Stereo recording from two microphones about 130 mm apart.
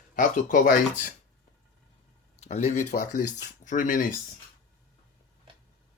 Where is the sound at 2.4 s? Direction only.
60° left (ahead or behind); by 4.1 s 90° left.